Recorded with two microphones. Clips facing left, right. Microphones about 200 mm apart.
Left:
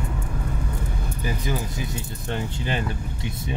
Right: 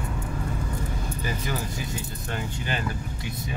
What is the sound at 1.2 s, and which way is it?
Speech, 15° left (ahead or behind).